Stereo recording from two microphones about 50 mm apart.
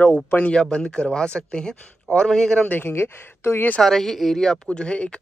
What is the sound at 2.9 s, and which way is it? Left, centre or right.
Speech, left.